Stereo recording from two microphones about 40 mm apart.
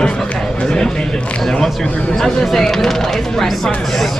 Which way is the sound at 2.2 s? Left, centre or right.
Centre.